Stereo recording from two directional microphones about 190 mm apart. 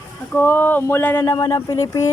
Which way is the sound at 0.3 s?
10° left (ahead or behind).